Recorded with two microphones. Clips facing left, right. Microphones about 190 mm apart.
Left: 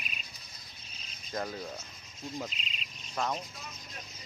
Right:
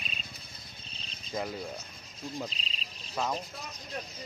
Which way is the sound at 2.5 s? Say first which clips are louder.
Right 1 dB; 35° right (ahead or behind).